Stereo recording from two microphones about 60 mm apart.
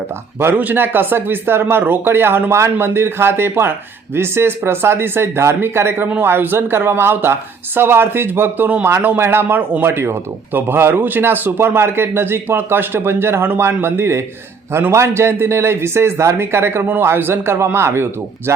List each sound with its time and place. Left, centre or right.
0.3 s speech: right